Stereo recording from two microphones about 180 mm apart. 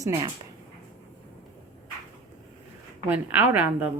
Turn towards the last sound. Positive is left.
turn(degrees=-10)  # may be behind; listen again after turning